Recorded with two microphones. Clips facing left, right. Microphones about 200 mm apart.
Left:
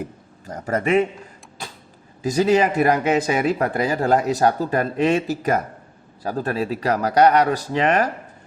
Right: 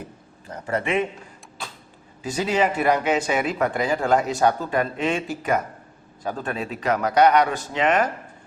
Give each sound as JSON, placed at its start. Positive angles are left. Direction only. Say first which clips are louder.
{"t": 0.4, "sound": "speech", "louder": "left 4 dB", "side_deg": 40}
{"t": 2.2, "sound": "speech", "louder": "left 5 dB", "side_deg": 40}